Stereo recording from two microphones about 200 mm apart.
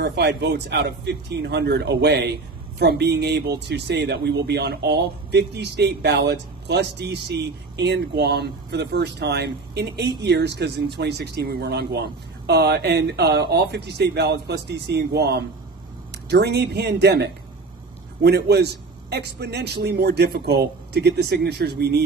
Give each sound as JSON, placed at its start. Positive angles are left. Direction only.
{"t": 0.0, "sound": "speech", "side_deg": -55}